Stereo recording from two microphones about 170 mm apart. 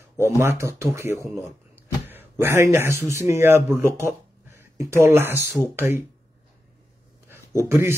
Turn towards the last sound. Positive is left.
turn(degrees=-15)  # may be behind; listen again after turning